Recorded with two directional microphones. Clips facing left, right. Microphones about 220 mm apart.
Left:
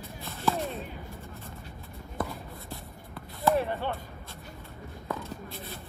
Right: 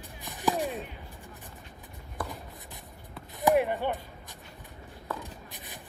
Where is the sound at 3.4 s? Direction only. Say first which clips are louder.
Right 2 dB; 15° right (ahead or behind).